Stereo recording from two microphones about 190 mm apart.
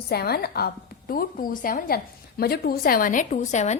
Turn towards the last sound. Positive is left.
turn(degrees=40)  # may be behind; listen again after turning